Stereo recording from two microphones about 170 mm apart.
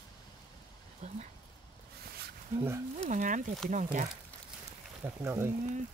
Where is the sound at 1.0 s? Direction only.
40° right (ahead or behind).